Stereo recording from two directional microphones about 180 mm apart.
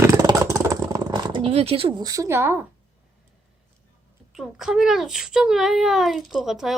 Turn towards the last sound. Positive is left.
turn(degrees=0)  # may be behind; listen again after turning